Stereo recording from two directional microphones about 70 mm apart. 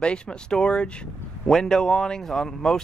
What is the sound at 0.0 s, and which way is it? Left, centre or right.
Speech, centre.